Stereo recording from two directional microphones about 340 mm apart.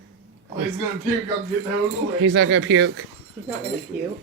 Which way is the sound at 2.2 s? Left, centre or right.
Right.